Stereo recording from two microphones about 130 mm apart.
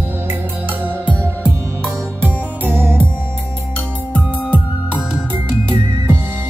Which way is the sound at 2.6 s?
15° right (ahead or behind).